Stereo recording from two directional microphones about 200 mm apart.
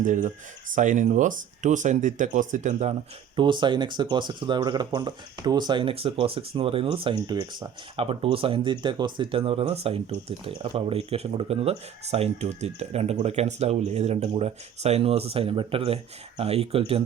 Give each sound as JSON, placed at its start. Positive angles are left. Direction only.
{"t": 0.0, "sound": "speech", "side_deg": -40}
{"t": 3.3, "sound": "speech", "side_deg": -25}